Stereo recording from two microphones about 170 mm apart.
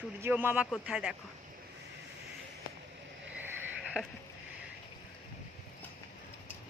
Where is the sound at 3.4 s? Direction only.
5° right (ahead or behind).